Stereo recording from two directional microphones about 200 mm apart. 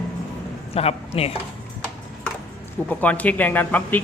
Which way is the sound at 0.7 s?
30° left (ahead or behind).